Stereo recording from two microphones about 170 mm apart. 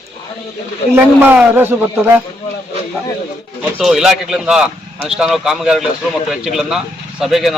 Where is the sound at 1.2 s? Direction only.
10° right (ahead or behind).